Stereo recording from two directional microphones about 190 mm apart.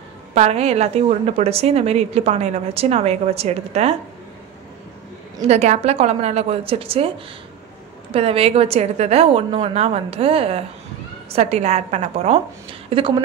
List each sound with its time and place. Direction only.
0.3 s a woman's voice: 35° right (ahead or behind)
5.5 s a woman's voice: 35° right (ahead or behind)
8.1 s a woman's voice: 30° right (ahead or behind)